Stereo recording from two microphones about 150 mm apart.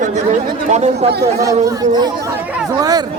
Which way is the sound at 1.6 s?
25° right (ahead or behind).